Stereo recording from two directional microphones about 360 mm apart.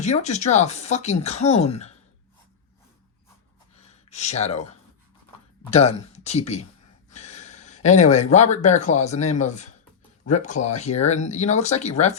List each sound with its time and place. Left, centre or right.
0.0 s speech: centre
3.8 s a sound: centre
5.7 s speech: centre